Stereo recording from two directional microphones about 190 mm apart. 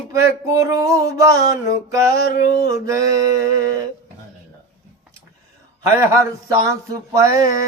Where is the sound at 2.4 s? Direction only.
50° left (ahead or behind).